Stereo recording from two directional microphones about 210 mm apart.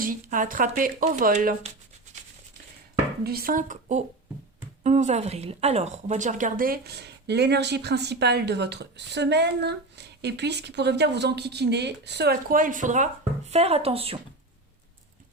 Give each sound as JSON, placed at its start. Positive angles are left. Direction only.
{"t": 0.0, "sound": "speech", "side_deg": -40}
{"t": 3.2, "sound": "a woman's voice", "side_deg": -45}